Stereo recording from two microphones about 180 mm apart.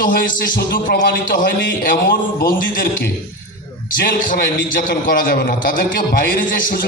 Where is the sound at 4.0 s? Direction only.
50° left (ahead or behind).